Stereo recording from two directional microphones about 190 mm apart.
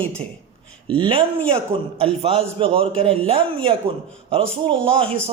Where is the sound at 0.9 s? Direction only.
25° right (ahead or behind).